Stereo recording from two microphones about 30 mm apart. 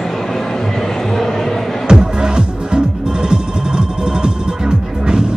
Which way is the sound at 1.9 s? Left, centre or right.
Right.